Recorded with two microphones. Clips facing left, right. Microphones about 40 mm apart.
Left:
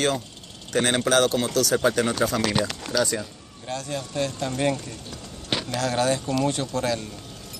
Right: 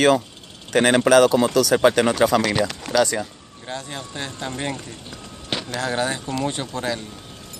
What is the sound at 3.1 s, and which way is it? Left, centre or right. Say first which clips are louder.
Speech: right 3 dB; right.